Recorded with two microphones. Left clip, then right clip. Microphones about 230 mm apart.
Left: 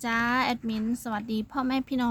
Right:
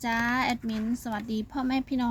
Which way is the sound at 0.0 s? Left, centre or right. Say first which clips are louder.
Left 1 dB; centre.